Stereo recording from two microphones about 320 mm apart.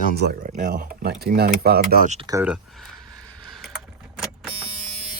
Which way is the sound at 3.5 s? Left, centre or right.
Centre.